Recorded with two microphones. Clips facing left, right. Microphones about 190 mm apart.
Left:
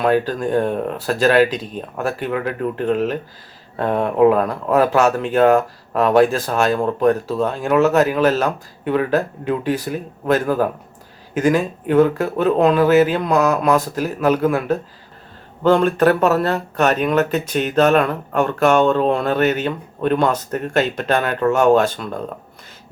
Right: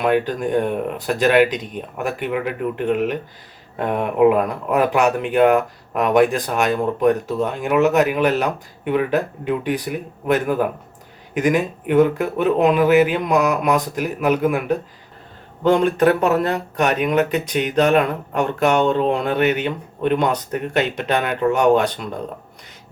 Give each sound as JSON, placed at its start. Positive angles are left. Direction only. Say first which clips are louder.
{"t": 0.3, "sound": "speech", "louder": "left 1 dB", "side_deg": -15}